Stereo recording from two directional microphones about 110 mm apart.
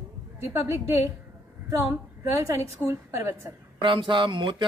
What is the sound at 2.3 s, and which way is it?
A woman's voice, 25° right (ahead or behind).